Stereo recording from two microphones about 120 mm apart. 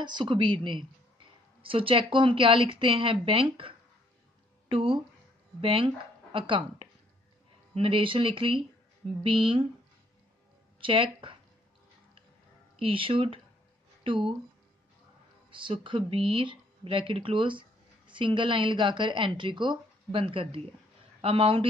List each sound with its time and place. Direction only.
0.0 s a woman's voice: 40° right (ahead or behind)
10.8 s speech: 45° right (ahead or behind)
12.7 s speech: 45° right (ahead or behind)
15.6 s speech: 45° right (ahead or behind)